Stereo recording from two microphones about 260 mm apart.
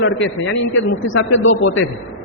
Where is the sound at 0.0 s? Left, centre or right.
Left.